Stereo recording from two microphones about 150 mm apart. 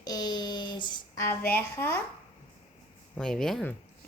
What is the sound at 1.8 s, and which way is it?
Speech, 15° left (ahead or behind).